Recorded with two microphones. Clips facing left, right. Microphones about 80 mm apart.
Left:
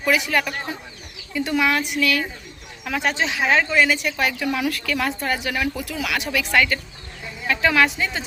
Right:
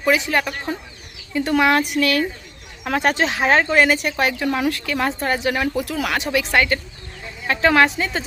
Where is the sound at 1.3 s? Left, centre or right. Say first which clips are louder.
Right 4 dB; right.